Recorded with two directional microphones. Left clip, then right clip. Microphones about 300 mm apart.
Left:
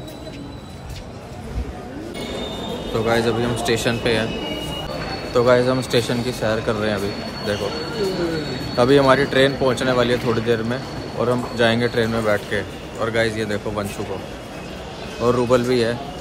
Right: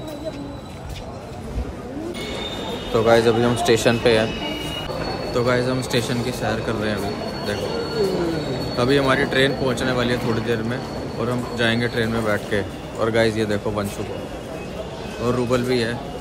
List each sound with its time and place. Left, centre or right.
2.9 s speech: centre
5.3 s speech: centre
8.7 s speech: centre
12.4 s a man's voice: centre
15.2 s speech: centre